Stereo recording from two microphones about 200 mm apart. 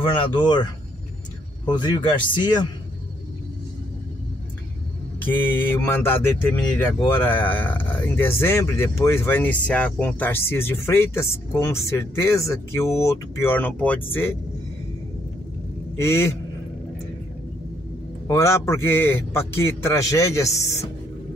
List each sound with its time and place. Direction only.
0.1 s speech: 25° left (ahead or behind)
1.7 s speech: 20° left (ahead or behind)
5.2 s speech: 10° left (ahead or behind)
16.0 s speech: 15° left (ahead or behind)
18.2 s speech: 15° left (ahead or behind)